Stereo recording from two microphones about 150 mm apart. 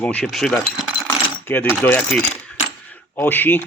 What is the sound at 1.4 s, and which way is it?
Speech, 15° left (ahead or behind).